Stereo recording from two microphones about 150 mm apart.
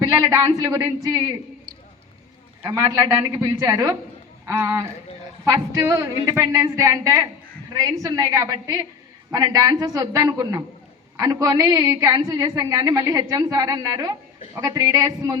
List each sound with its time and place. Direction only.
0.0 s a woman's voice: 20° right (ahead or behind)
2.6 s a woman's voice: 20° right (ahead or behind)